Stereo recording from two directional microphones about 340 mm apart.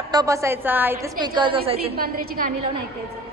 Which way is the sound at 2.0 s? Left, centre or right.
Right.